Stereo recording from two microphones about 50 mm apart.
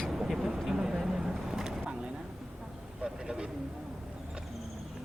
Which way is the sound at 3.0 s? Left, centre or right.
Centre.